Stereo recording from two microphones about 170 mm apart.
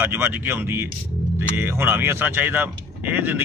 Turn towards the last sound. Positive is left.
turn(degrees=-10)  # may be behind; listen again after turning